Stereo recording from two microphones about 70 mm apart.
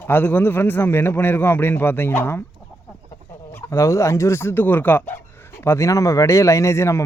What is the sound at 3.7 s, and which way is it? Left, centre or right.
A man's voice, left.